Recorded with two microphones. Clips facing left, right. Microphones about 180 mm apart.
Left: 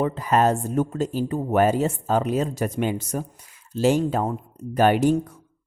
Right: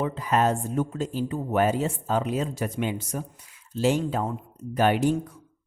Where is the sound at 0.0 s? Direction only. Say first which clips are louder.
Left 3 dB; 45° left (ahead or behind).